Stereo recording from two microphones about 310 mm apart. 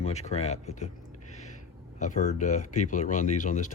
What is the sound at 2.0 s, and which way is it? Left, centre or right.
Speech, left.